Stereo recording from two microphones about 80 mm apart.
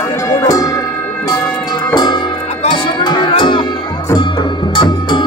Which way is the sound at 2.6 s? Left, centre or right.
Left.